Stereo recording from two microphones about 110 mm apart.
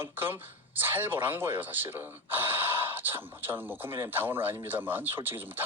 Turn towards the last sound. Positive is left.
turn(degrees=-20)  # may be behind; listen again after turning